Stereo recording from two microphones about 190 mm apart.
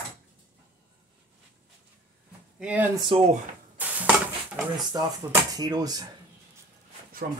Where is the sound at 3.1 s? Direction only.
30° right (ahead or behind).